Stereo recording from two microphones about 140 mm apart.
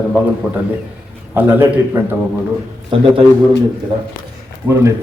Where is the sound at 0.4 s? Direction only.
10° right (ahead or behind).